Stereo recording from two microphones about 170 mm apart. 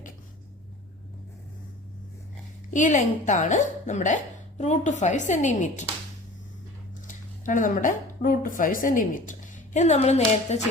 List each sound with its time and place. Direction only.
2.6 s speech: 50° left (ahead or behind)
7.1 s a woman's voice: 50° left (ahead or behind)